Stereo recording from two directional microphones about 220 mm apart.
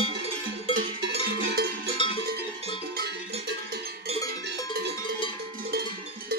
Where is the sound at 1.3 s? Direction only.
45° right (ahead or behind).